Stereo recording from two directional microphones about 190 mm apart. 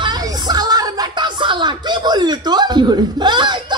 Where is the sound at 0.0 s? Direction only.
20° right (ahead or behind).